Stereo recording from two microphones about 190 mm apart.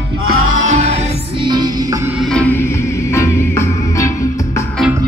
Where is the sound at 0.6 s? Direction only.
35° right (ahead or behind); by 2.1 s 20° right (ahead or behind).